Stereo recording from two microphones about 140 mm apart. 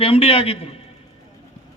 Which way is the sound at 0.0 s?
40° left (ahead or behind).